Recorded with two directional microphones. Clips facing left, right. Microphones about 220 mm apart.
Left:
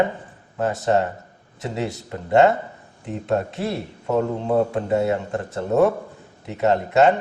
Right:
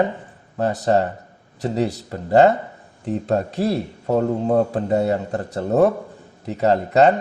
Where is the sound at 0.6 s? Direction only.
35° right (ahead or behind).